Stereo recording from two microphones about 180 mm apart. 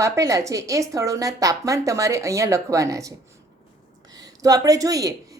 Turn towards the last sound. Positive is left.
turn(degrees=-20)  # may be behind; listen again after turning